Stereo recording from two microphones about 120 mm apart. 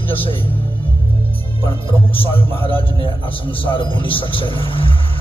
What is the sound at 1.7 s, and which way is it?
A man's voice, 50° left (ahead or behind).